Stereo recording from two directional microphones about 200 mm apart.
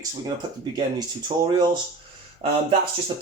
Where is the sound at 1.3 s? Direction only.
25° right (ahead or behind).